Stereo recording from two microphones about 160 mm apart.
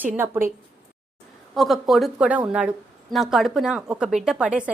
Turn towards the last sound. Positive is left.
turn(degrees=-5)  # may be behind; listen again after turning